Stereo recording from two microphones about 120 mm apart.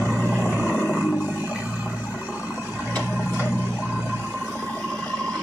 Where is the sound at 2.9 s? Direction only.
10° left (ahead or behind).